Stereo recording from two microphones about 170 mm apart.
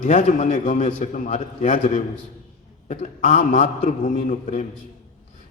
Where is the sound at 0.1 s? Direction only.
45° left (ahead or behind).